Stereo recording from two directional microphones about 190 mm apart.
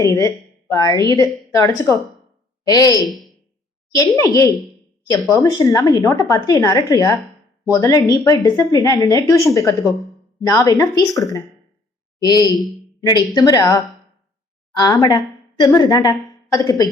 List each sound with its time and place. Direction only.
0.0 s a woman's voice: 15° left (ahead or behind)
3.1 s a sound: centre (ahead or behind)
3.9 s a woman's voice: 15° left (ahead or behind)
10.4 s a woman's voice: 20° left (ahead or behind)